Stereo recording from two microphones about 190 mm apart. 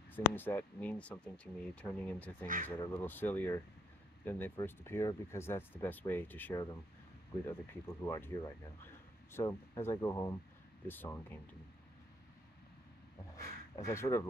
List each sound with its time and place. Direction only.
0.1 s speech: 10° left (ahead or behind)
2.4 s speech: 45° right (ahead or behind)
2.7 s speech: 10° left (ahead or behind)
9.3 s speech: 15° left (ahead or behind)
13.7 s speech: 15° left (ahead or behind)